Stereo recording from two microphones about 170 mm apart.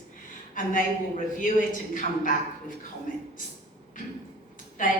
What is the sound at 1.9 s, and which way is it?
Speech, 50° left (ahead or behind).